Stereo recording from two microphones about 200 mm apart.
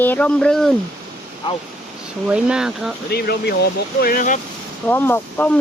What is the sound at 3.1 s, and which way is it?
Speech, 55° left (ahead or behind).